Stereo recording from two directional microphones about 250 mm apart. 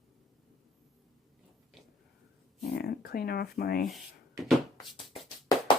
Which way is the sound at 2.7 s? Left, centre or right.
Left.